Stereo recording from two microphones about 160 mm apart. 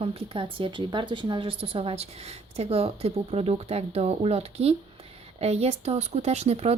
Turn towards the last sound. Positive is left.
turn(degrees=-40)  # may be behind; listen again after turning